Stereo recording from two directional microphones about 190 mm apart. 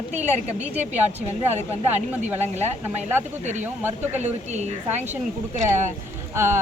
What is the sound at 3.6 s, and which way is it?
Speech, 10° right (ahead or behind).